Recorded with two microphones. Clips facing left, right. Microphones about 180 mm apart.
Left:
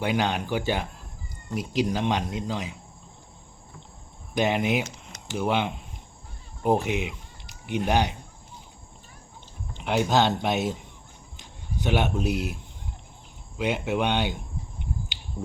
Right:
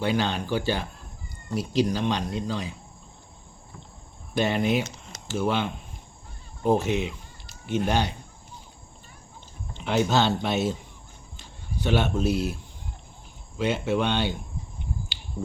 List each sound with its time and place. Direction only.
0.0 s speech: 15° left (ahead or behind)
4.4 s speech: 15° left (ahead or behind)
9.7 s speech: 15° left (ahead or behind)
13.6 s speech: 15° left (ahead or behind)